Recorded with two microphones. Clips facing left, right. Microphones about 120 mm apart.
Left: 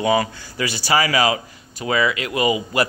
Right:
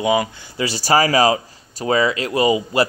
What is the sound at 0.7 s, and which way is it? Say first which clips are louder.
Speech: right 4 dB; 40° right (ahead or behind).